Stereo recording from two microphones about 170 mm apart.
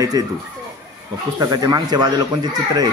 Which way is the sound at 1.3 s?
20° right (ahead or behind).